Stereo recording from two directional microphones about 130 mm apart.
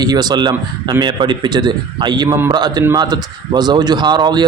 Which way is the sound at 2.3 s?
20° right (ahead or behind).